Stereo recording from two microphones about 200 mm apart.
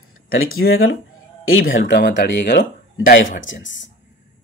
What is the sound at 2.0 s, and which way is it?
Speech, 55° left (ahead or behind).